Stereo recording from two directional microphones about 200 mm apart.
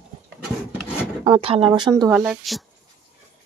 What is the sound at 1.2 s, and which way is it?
Speech, 25° right (ahead or behind).